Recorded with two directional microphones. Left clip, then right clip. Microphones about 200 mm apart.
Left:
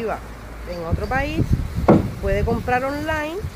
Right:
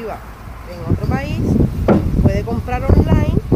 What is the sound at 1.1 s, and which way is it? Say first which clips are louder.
Speech: right 3 dB; centre (ahead or behind).